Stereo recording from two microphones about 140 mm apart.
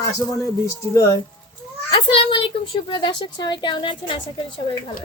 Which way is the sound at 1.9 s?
40° left (ahead or behind).